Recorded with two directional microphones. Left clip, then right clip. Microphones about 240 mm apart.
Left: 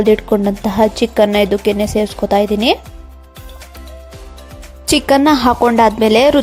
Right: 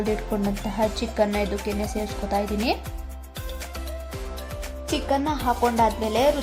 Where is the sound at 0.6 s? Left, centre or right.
Left.